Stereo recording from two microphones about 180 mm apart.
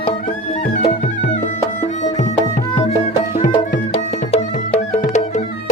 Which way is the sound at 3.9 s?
35° left (ahead or behind).